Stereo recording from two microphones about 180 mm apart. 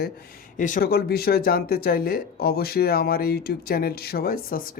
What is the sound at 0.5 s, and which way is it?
Speech, 45° left (ahead or behind).